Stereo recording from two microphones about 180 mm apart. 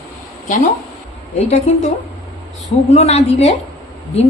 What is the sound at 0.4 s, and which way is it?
Speech, 45° left (ahead or behind).